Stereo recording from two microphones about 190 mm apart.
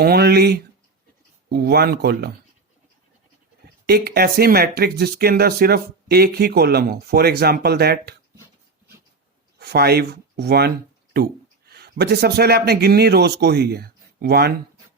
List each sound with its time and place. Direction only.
0.0 s speech: 55° right (ahead or behind)
3.8 s speech: 55° right (ahead or behind)
9.6 s speech: 55° right (ahead or behind)